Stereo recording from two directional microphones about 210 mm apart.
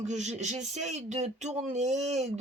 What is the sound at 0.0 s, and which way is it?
Speech, 35° right (ahead or behind).